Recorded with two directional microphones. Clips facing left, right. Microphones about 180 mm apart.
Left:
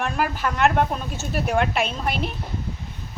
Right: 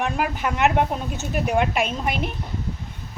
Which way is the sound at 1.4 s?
5° right (ahead or behind).